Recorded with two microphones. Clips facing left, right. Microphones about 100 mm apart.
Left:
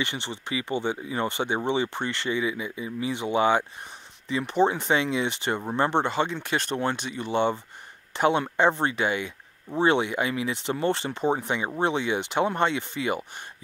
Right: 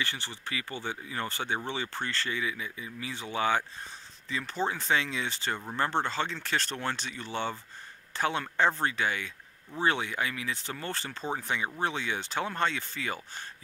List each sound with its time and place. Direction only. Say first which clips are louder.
0.0 s speech: left 5 dB; 20° left (ahead or behind)